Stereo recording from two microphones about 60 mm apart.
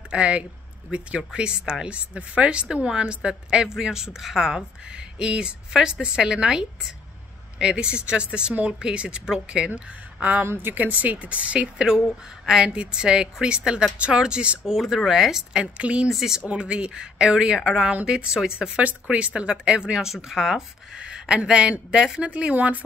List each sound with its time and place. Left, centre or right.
0.1 s speech: centre
10.4 s a woman's voice: right
10.7 s speech: right
14.7 s speech: centre
15.6 s speech: centre
16.1 s speech: centre
16.4 s speech: centre
18.8 s speech: right